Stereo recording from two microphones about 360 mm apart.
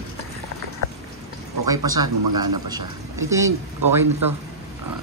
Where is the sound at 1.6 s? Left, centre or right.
Centre.